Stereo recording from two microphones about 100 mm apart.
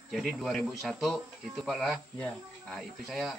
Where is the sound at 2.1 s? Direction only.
15° left (ahead or behind).